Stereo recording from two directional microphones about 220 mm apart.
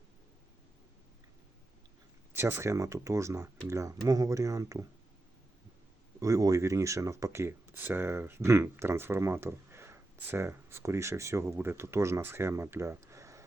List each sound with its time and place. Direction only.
2.3 s speech: 10° right (ahead or behind)
6.1 s speech: 15° right (ahead or behind)